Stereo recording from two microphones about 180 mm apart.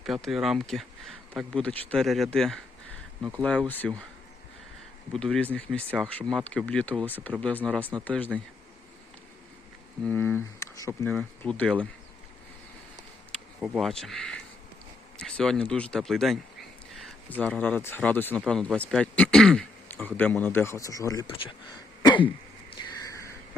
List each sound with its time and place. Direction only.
0.0 s speech: centre (ahead or behind)
5.1 s speech: 5° left (ahead or behind)
10.0 s speech: 10° left (ahead or behind)
13.6 s speech: centre (ahead or behind); by 21.2 s 20° left (ahead or behind)
21.2 s speech: 30° left (ahead or behind)
22.0 s throat clearing: 25° left (ahead or behind)
22.7 s a sound: 20° left (ahead or behind)